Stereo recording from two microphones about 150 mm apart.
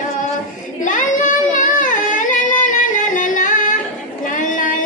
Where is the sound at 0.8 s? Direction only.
60° left (ahead or behind).